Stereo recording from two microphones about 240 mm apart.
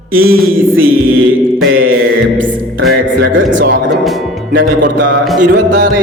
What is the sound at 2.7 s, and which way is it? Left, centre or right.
Speech, right.